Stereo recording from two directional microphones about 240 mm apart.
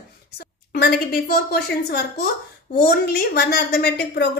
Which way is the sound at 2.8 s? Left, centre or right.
Left.